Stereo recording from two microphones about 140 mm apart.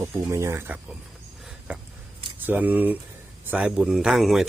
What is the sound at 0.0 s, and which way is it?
Speech, 20° right (ahead or behind).